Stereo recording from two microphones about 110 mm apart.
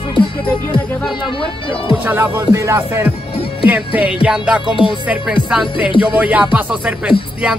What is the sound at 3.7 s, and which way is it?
Speech, 10° right (ahead or behind).